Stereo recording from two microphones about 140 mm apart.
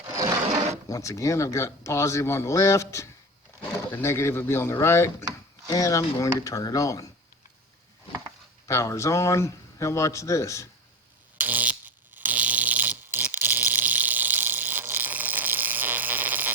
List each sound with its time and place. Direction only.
0.1 s a sound: 25° right (ahead or behind)
0.9 s speech: 20° left (ahead or behind)
8.6 s speech: 20° left (ahead or behind)
11.3 s fart: 10° right (ahead or behind)